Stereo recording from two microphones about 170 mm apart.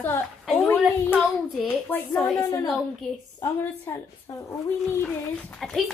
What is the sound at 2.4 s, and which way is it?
A woman's voice, 20° left (ahead or behind).